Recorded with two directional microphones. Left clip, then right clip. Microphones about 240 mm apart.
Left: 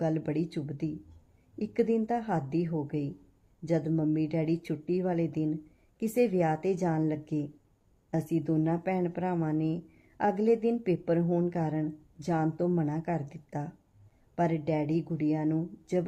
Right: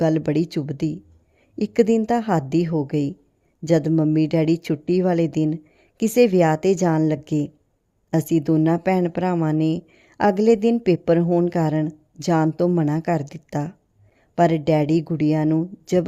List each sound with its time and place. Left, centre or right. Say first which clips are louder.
0.0 s speech: right 11 dB; right